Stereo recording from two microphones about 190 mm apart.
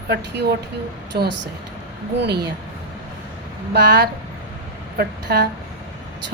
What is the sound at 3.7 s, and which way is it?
A woman's voice, 60° right (ahead or behind).